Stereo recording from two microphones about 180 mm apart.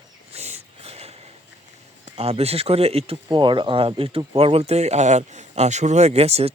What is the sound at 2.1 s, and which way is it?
Speech, 35° right (ahead or behind).